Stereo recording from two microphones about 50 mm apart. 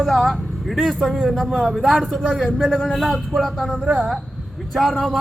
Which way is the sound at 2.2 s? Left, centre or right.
Centre.